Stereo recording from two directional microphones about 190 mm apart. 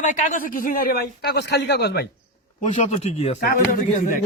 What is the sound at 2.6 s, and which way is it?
Speech, 40° left (ahead or behind).